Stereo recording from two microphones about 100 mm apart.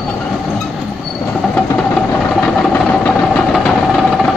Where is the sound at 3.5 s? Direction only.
Centre (ahead or behind).